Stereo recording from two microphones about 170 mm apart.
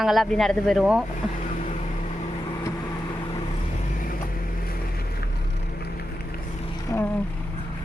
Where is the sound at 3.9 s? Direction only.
55° left (ahead or behind).